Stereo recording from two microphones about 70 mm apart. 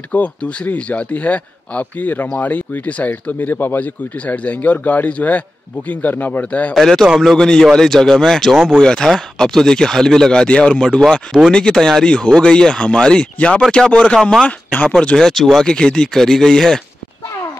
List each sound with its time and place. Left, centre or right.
0.1 s speech: centre
6.7 s speech: centre; by 15.0 s left
15.0 s speech: centre